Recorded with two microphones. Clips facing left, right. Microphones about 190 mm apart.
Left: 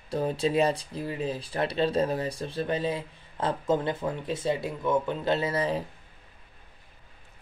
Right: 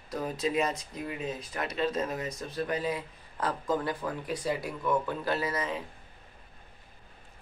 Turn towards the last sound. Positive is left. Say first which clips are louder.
# left 5 dB
turn(degrees=30)  # may be behind; listen again after turning